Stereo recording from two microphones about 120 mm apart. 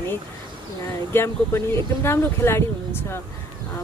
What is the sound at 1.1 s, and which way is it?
Speech, 20° left (ahead or behind).